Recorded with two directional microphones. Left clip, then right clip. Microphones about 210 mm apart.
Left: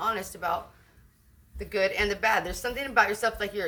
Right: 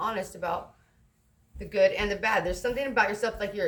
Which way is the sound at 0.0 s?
20° left (ahead or behind).